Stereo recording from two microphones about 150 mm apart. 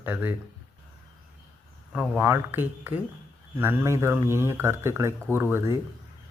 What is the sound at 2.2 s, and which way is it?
Speech, 15° right (ahead or behind).